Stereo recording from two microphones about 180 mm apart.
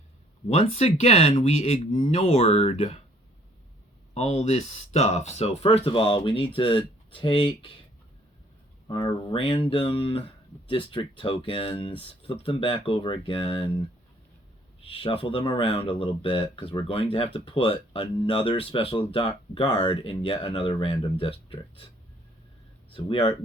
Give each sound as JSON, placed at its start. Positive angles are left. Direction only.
{"t": 0.4, "sound": "speech", "side_deg": 35}
{"t": 4.1, "sound": "speech", "side_deg": 35}
{"t": 8.9, "sound": "speech", "side_deg": 25}
{"t": 14.8, "sound": "speech", "side_deg": 30}
{"t": 22.9, "sound": "speech", "side_deg": 30}